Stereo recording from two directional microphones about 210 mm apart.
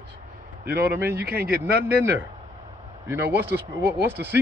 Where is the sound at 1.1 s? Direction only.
50° right (ahead or behind).